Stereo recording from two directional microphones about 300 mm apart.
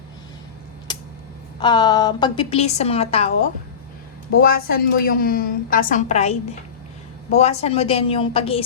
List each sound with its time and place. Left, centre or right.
0.9 s a sound: centre
1.5 s a woman's voice: centre
4.4 s a woman's voice: left